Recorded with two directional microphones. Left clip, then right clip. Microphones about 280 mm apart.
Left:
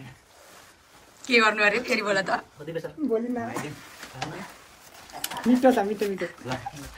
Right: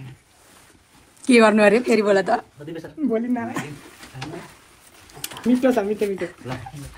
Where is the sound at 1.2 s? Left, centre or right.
Centre.